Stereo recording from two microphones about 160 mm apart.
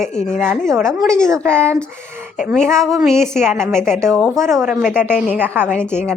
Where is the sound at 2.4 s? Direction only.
5° right (ahead or behind).